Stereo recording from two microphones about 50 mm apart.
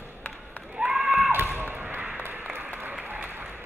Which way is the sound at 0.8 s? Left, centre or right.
Centre.